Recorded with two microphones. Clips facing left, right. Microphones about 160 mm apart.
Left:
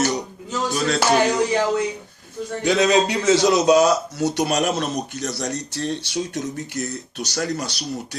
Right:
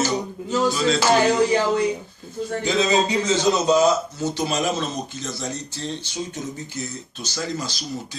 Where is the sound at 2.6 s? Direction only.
70° left (ahead or behind).